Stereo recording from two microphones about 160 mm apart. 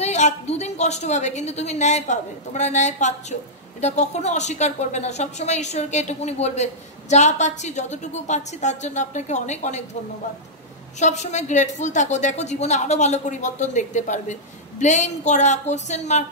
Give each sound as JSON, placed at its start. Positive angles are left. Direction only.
{"t": 0.0, "sound": "a woman's voice", "side_deg": 45}
{"t": 11.0, "sound": "a woman's voice", "side_deg": 45}